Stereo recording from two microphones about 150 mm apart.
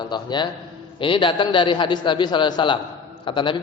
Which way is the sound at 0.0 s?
30° left (ahead or behind).